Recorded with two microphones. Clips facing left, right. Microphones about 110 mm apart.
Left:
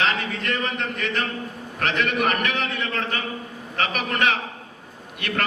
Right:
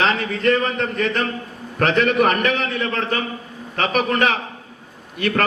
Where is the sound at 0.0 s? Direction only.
35° right (ahead or behind).